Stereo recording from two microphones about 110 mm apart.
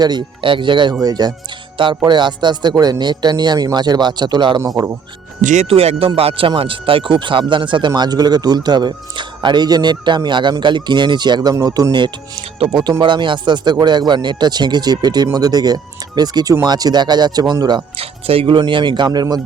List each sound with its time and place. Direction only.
0.0 s speech: 40° right (ahead or behind)
5.5 s speech: 75° right (ahead or behind); by 12.1 s 40° right (ahead or behind)
12.5 s speech: 60° right (ahead or behind)
12.8 s speech: 45° right (ahead or behind)
17.9 s speech: 60° right (ahead or behind); by 19.4 s 40° right (ahead or behind)